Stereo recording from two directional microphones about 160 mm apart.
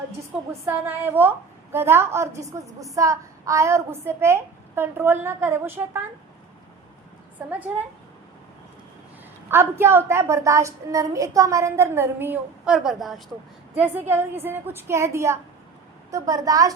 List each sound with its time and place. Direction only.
0.6 s a woman's voice: 15° right (ahead or behind)
7.3 s a woman's voice: 10° right (ahead or behind)
9.5 s a woman's voice: 15° right (ahead or behind)